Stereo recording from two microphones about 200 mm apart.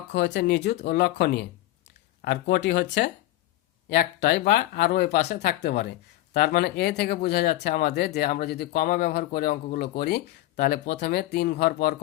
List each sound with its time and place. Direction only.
0.1 s speech: 60° left (ahead or behind)